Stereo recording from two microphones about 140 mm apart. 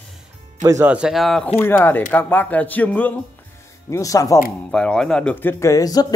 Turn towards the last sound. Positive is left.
turn(degrees=25)  # may be behind; listen again after turning